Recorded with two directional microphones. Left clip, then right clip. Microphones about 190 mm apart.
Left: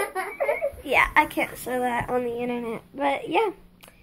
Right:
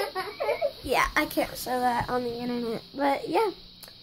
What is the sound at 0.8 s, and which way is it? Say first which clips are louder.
Child singing: left 6 dB; 10° right (ahead or behind).